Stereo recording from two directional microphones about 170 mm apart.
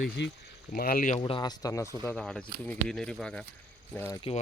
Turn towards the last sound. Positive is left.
turn(degrees=35)  # may be behind; listen again after turning